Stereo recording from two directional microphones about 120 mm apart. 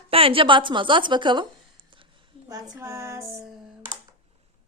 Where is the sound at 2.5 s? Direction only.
30° right (ahead or behind).